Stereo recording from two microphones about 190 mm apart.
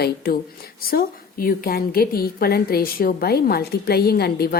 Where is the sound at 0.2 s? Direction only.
50° left (ahead or behind).